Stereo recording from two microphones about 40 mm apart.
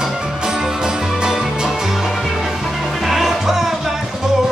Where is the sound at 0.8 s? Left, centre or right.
Centre.